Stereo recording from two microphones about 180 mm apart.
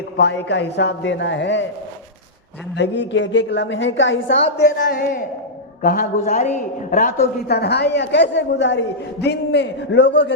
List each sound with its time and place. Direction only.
0.2 s speech: 70° left (ahead or behind)
2.7 s a woman's voice: 90° left
4.5 s speech: 70° left (ahead or behind)
5.8 s a woman's voice: 50° left (ahead or behind); by 8.8 s 80° left
9.2 s speech: 65° left (ahead or behind)